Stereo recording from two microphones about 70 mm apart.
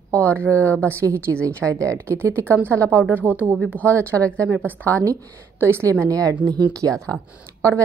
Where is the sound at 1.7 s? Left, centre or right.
Right.